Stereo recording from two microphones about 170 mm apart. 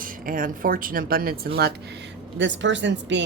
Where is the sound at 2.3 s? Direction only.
90° right.